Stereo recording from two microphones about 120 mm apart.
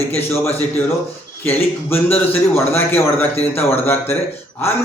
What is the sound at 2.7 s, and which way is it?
A man's voice, 15° left (ahead or behind).